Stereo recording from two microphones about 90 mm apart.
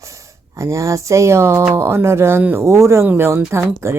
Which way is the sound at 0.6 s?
35° right (ahead or behind).